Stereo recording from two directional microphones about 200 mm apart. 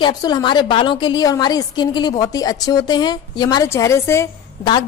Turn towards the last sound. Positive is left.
turn(degrees=20)  # may be behind; listen again after turning